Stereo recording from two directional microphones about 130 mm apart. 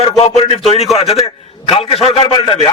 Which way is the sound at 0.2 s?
45° left (ahead or behind).